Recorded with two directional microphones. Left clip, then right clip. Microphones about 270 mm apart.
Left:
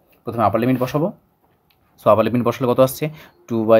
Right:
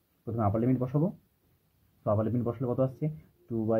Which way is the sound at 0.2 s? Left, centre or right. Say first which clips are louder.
Left 13 dB; left.